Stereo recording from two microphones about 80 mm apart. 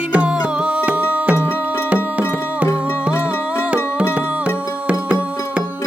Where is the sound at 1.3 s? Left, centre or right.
Left.